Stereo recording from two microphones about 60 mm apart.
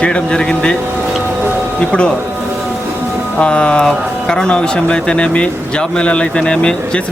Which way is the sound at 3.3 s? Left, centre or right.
Centre.